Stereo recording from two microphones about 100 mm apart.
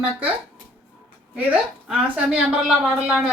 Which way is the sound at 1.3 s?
10° right (ahead or behind).